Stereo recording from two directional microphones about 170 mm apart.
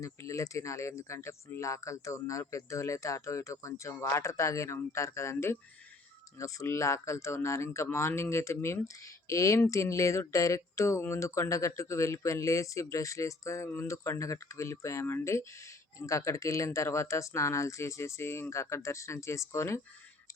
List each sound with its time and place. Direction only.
0.0 s speech: 20° left (ahead or behind)